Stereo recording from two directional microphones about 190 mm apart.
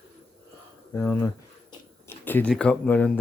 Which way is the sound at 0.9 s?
10° left (ahead or behind).